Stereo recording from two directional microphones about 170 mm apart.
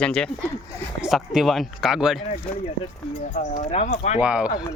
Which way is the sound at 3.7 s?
40° left (ahead or behind).